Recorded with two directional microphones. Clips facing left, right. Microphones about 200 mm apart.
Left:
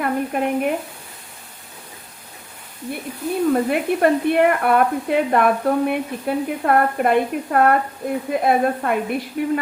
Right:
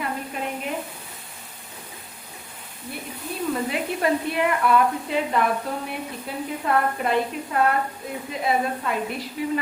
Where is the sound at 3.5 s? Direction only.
55° left (ahead or behind).